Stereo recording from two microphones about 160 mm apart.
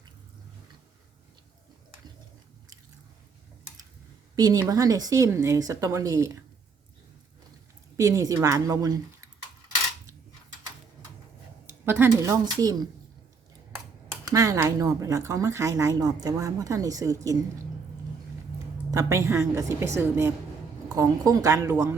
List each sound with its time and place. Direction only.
4.4 s speech: 25° right (ahead or behind)
7.9 s speech: 20° right (ahead or behind)
11.9 s speech: 15° right (ahead or behind)
14.3 s speech: 20° right (ahead or behind)
18.9 s a woman's voice: 20° right (ahead or behind)